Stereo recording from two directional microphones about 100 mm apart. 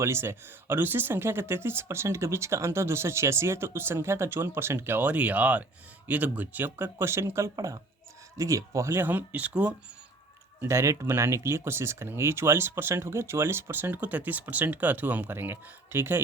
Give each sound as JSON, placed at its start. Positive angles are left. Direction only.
{"t": 0.0, "sound": "speech", "side_deg": -25}
{"t": 10.6, "sound": "speech", "side_deg": -30}